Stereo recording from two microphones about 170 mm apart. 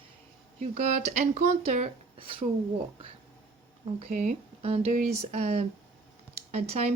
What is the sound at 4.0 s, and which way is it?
Speech, 45° right (ahead or behind).